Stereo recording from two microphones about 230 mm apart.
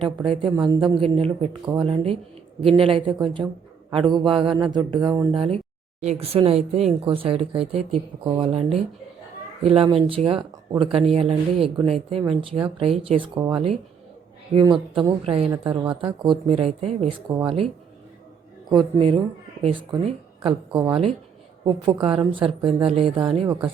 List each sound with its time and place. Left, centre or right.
0.0 s a woman's voice: right
18.7 s a woman's voice: right